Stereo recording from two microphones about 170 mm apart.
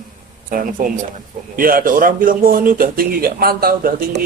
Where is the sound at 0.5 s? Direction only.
55° right (ahead or behind).